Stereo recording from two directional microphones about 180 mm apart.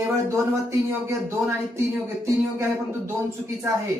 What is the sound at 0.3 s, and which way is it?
Speech, 15° right (ahead or behind).